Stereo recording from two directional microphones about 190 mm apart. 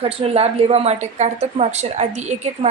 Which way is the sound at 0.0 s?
30° right (ahead or behind).